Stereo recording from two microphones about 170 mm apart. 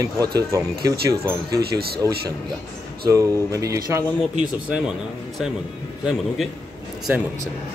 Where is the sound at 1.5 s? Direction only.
65° right (ahead or behind).